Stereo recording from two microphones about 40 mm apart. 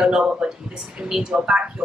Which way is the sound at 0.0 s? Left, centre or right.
Right.